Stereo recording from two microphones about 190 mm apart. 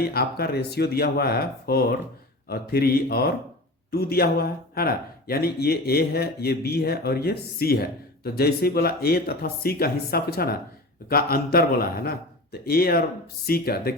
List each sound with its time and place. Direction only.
0.0 s a man's voice: 55° left (ahead or behind)